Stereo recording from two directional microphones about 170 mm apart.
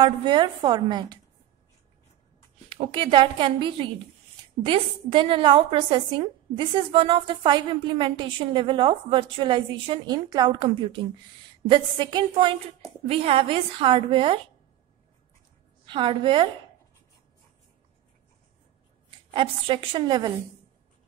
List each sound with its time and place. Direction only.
0.0 s a woman's voice: 25° right (ahead or behind)
2.7 s a woman's voice: 30° right (ahead or behind)
15.8 s a woman's voice: 30° right (ahead or behind)
19.0 s a woman's voice: 30° right (ahead or behind)